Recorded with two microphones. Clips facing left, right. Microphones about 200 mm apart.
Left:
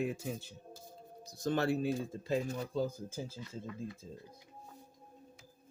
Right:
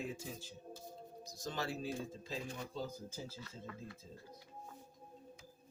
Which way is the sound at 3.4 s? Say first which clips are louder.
Left 7 dB; 15° left (ahead or behind).